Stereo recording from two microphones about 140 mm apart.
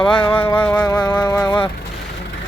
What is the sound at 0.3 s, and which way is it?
Music, 10° left (ahead or behind).